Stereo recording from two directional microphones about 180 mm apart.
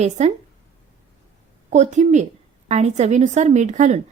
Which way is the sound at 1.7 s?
40° right (ahead or behind).